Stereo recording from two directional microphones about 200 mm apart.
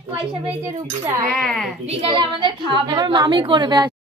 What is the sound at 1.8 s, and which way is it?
A woman's voice, 25° right (ahead or behind).